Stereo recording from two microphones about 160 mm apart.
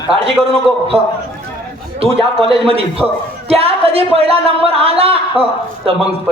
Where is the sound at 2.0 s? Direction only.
35° right (ahead or behind).